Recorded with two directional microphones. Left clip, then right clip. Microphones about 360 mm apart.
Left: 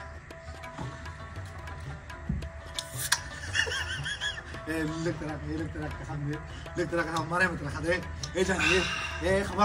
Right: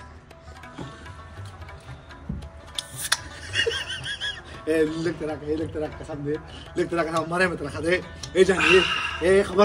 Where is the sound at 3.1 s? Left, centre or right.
Centre.